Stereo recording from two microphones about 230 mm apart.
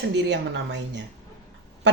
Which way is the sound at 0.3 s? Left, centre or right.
Right.